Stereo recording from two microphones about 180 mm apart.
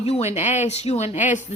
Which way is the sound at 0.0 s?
35° left (ahead or behind).